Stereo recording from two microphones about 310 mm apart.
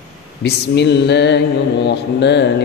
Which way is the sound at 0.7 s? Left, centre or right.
Left.